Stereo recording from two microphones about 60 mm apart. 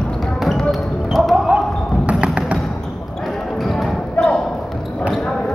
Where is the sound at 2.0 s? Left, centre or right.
Centre.